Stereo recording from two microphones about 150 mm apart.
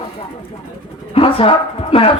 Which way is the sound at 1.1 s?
40° left (ahead or behind).